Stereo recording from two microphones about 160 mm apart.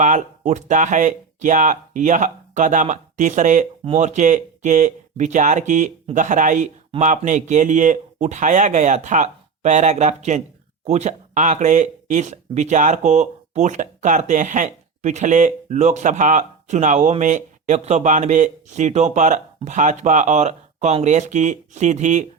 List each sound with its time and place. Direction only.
0.0 s speech: 50° right (ahead or behind)